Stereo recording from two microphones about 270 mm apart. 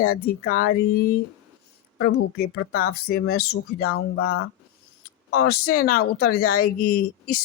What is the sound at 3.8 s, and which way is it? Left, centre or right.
Speech, left.